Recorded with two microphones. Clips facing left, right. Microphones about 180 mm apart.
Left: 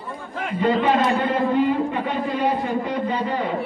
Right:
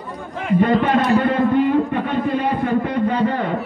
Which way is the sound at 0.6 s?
55° right (ahead or behind).